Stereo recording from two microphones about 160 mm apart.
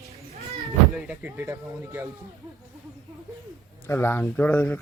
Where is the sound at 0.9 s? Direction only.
5° right (ahead or behind).